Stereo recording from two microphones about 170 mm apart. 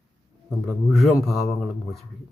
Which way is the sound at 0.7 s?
Centre (ahead or behind).